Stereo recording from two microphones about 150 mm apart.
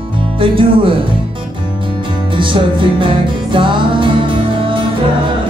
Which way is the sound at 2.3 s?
35° right (ahead or behind).